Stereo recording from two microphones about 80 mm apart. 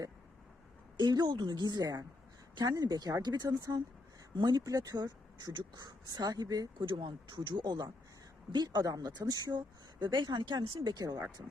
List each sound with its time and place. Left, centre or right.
0.9 s speech: right
1.3 s speech: right
4.6 s speech: right
6.8 s speech: right
10.8 s speech: right